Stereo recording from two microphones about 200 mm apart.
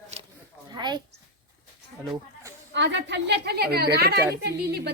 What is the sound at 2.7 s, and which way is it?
A woman's voice, 60° right (ahead or behind).